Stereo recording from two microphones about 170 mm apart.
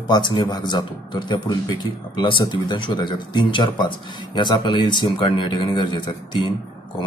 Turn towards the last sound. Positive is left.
turn(degrees=25)  # may be behind; listen again after turning